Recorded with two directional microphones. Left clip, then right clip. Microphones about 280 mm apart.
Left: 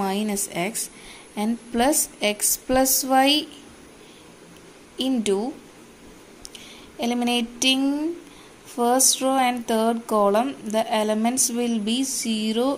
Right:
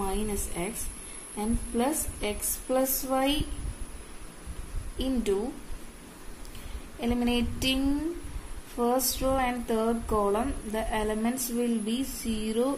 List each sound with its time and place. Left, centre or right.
0.0 s speech: left
4.9 s speech: centre
7.0 s a sound: centre
8.7 s speech: left